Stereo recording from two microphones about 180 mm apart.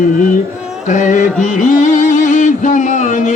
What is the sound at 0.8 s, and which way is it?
Music, 45° left (ahead or behind).